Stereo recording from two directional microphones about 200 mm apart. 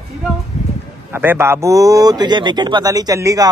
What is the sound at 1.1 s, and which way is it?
A man's voice, 10° right (ahead or behind).